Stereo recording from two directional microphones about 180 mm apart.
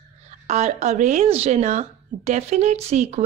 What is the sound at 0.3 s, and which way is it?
Speech, 40° right (ahead or behind).